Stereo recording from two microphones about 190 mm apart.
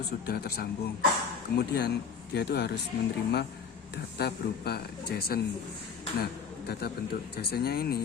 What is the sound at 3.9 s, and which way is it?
Speech, 55° left (ahead or behind).